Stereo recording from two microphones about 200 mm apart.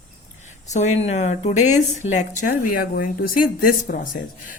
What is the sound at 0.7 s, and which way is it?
A woman's voice, 35° left (ahead or behind).